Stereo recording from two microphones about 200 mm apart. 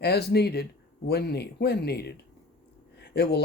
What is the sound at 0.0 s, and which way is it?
Speech, 55° left (ahead or behind).